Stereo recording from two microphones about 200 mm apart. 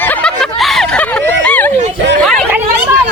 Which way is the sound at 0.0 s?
5° left (ahead or behind).